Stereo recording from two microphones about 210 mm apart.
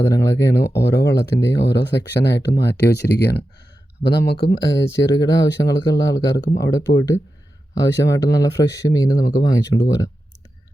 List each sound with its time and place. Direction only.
0.0 s speech: 15° left (ahead or behind)
0.6 s speech: 55° left (ahead or behind)
5.0 s speech: 15° left (ahead or behind)